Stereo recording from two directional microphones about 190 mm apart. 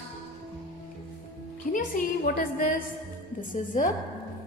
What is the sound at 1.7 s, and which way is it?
A woman's voice, 45° left (ahead or behind).